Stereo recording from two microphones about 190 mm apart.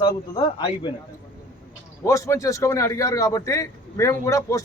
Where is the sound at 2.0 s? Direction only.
15° left (ahead or behind).